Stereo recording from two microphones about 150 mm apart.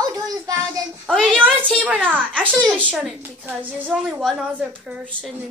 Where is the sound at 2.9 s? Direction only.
10° right (ahead or behind).